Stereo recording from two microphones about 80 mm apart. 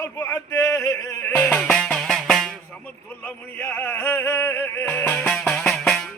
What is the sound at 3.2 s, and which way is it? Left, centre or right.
Music, left.